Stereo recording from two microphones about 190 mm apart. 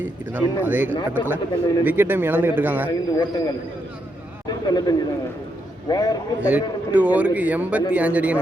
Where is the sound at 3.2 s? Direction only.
20° left (ahead or behind).